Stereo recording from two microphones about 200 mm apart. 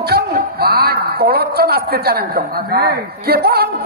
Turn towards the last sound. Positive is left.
turn(degrees=-55)  # may be behind; listen again after turning